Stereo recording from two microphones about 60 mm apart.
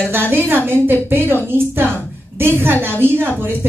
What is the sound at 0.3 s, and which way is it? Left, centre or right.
Speech, right.